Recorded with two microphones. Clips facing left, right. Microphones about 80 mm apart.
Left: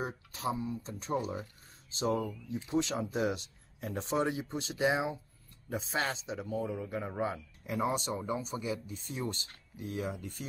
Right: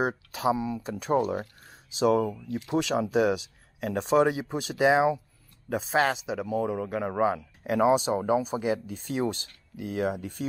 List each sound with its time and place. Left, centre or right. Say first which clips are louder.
0.0 s speech: right 9 dB; right